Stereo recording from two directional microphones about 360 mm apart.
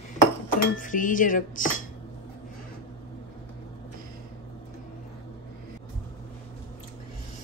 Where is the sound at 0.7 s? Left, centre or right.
Left.